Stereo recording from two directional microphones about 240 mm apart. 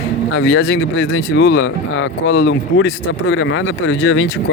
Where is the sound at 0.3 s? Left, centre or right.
Left.